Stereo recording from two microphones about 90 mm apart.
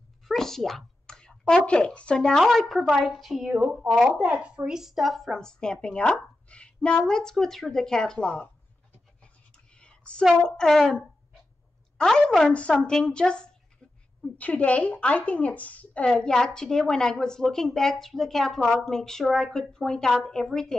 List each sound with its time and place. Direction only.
0.3 s speech: 5° left (ahead or behind)
2.7 s a woman's voice: 5° right (ahead or behind); by 8.5 s 10° left (ahead or behind)
9.8 s a sound: 10° left (ahead or behind)
10.4 s a woman's voice: 5° left (ahead or behind)